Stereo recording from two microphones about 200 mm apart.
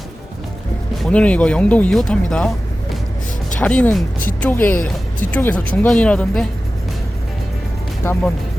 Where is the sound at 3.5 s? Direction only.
5° left (ahead or behind).